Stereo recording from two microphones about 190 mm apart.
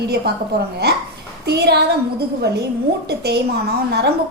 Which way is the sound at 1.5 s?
60° right (ahead or behind).